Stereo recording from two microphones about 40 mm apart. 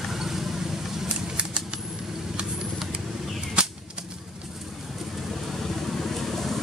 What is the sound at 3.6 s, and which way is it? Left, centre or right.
Whip, right.